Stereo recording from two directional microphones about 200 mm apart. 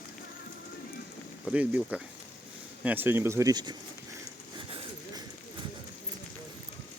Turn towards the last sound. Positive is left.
turn(degrees=-25)  # may be behind; listen again after turning